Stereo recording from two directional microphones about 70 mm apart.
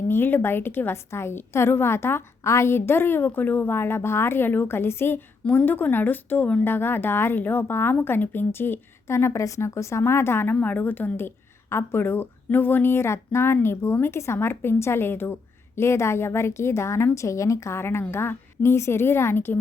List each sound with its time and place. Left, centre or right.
0.1 s a woman's voice: left